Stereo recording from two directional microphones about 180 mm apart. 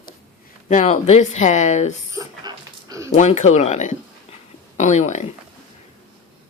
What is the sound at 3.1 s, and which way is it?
Speech, 40° left (ahead or behind).